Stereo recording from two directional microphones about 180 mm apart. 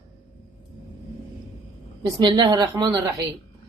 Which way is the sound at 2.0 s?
20° right (ahead or behind).